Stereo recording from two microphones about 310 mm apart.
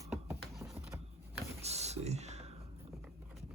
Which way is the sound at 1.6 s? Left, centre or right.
Right.